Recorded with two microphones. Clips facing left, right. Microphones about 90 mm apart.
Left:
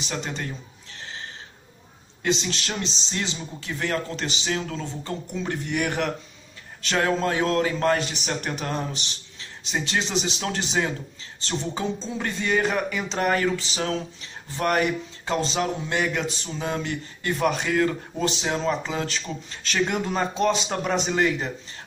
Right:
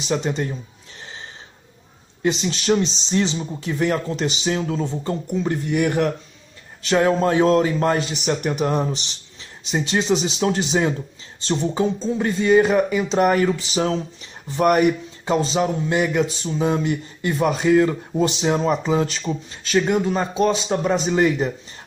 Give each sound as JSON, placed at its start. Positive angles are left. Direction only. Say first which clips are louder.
{"t": 0.1, "sound": "speech", "louder": "right 9 dB", "side_deg": -20}
{"t": 2.2, "sound": "speech", "louder": "right 6 dB", "side_deg": -15}
{"t": 5.4, "sound": "speech", "louder": "right 5 dB", "side_deg": -5}
{"t": 7.1, "sound": "speech", "louder": "right 7 dB", "side_deg": -25}